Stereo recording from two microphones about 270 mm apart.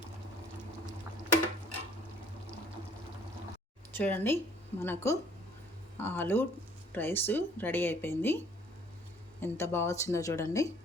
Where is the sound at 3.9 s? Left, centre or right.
Centre.